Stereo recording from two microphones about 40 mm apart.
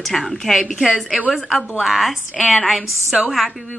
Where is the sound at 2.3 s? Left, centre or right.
Centre.